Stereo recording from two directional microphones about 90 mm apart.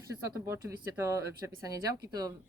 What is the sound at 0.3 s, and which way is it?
Speech, 35° right (ahead or behind).